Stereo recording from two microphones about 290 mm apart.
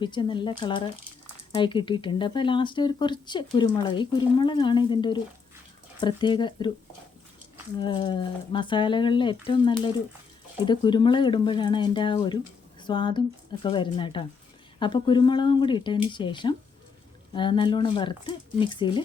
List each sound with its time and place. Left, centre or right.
0.0 s speech: centre
7.8 s speech: centre